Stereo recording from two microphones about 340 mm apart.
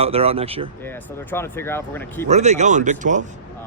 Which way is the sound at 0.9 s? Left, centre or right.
Centre.